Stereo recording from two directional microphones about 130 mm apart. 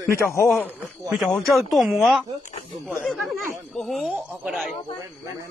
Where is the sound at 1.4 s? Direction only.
Centre (ahead or behind).